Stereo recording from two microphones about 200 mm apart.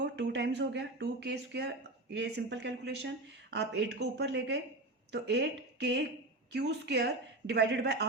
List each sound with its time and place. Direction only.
0.0 s speech: 60° right (ahead or behind)